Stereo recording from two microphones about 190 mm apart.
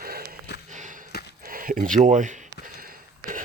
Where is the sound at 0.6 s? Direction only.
40° right (ahead or behind).